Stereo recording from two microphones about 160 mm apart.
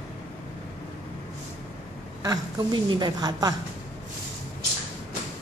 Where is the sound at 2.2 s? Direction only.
25° right (ahead or behind).